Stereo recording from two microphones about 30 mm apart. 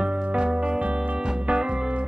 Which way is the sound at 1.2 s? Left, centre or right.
Right.